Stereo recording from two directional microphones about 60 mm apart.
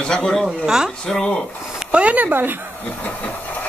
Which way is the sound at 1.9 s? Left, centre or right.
Right.